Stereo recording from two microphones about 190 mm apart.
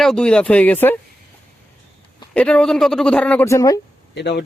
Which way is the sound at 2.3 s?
5° left (ahead or behind).